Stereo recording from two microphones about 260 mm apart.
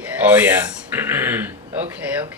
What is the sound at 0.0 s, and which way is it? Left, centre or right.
Speech, centre.